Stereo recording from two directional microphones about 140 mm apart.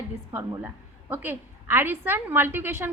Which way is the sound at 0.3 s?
15° right (ahead or behind).